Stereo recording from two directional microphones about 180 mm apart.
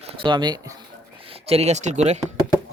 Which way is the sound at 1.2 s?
35° right (ahead or behind).